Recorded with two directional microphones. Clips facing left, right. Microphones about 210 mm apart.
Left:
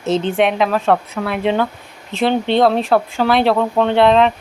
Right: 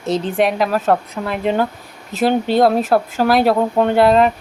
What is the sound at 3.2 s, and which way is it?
Speech, 40° right (ahead or behind).